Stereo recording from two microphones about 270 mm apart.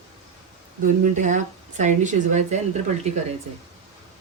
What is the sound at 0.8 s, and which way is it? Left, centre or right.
Speech, right.